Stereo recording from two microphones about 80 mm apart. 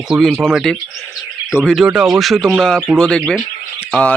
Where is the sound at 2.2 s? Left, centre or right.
Centre.